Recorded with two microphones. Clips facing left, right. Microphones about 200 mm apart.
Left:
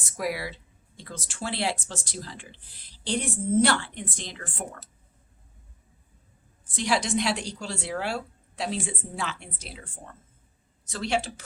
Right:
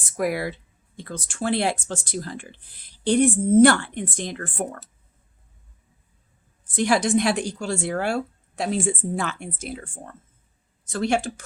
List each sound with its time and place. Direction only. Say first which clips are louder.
0.0 s speech: right 6 dB; 50° right (ahead or behind)
6.7 s speech: right 6 dB; 50° right (ahead or behind)